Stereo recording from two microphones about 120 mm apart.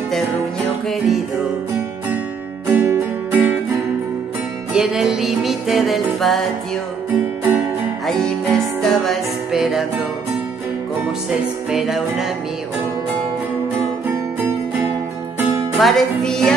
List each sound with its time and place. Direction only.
0.8 s music: centre (ahead or behind)
2.7 s music: 15° right (ahead or behind)
4.7 s music: 5° right (ahead or behind)
8.1 s music: 5° left (ahead or behind)
11.7 s music: centre (ahead or behind)
14.0 s music: 20° right (ahead or behind)
15.8 s music: centre (ahead or behind)